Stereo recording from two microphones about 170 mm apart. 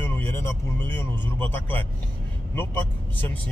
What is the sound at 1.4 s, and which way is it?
Speech, 10° left (ahead or behind).